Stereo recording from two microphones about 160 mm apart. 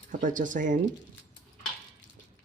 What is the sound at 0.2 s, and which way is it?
Speech, 55° right (ahead or behind).